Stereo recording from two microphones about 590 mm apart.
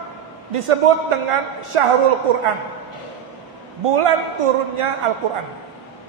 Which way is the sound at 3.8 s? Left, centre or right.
Right.